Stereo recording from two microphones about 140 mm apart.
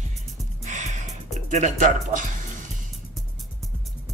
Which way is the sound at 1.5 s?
60° right (ahead or behind).